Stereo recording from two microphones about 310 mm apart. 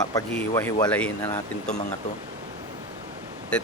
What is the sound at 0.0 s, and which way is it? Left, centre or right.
Speech, centre.